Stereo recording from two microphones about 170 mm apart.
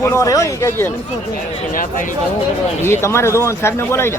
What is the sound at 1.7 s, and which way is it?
Speech, 50° left (ahead or behind).